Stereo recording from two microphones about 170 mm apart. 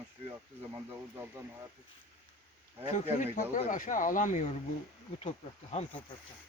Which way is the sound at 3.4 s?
50° left (ahead or behind).